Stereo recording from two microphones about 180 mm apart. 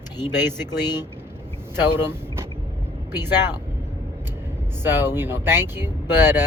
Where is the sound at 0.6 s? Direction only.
25° left (ahead or behind).